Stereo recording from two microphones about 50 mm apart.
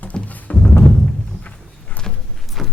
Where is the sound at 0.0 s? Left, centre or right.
Left.